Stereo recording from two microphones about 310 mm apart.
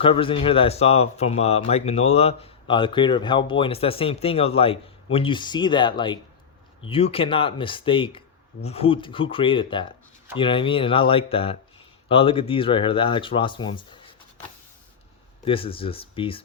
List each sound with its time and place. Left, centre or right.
0.0 s speech: centre
15.4 s speech: centre